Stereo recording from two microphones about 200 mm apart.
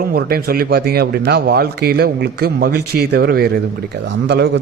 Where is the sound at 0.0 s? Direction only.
50° right (ahead or behind).